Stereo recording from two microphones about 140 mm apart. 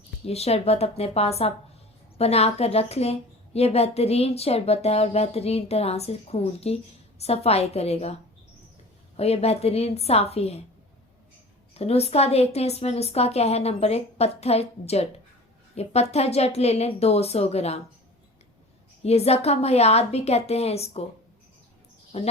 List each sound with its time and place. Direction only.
0.3 s a woman's voice: 45° left (ahead or behind)
9.1 s a woman's voice: 45° left (ahead or behind)
11.7 s a woman's voice: 45° left (ahead or behind)
19.0 s a woman's voice: 50° left (ahead or behind)
22.1 s a woman's voice: 50° left (ahead or behind)